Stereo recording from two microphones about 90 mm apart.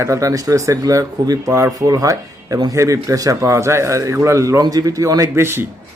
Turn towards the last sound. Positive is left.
turn(degrees=-25)  # may be behind; listen again after turning